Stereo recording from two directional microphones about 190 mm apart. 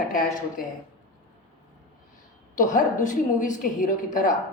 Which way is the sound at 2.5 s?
40° left (ahead or behind).